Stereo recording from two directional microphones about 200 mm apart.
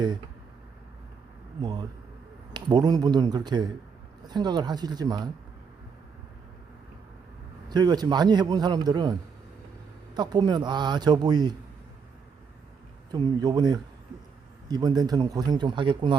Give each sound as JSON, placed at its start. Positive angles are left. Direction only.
{"t": 1.6, "sound": "a man's voice", "side_deg": -20}
{"t": 7.7, "sound": "a man's voice", "side_deg": -20}
{"t": 10.2, "sound": "a man's voice", "side_deg": -20}
{"t": 13.1, "sound": "a man's voice", "side_deg": -20}